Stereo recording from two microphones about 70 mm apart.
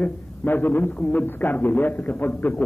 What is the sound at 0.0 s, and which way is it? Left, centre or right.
A man's voice, left.